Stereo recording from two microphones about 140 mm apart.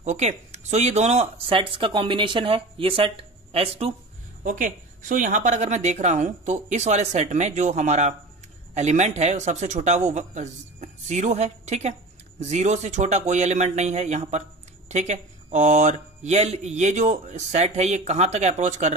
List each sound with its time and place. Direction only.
0.0 s speech: 55° right (ahead or behind)
4.4 s speech: 75° right (ahead or behind); by 18.9 s 55° right (ahead or behind)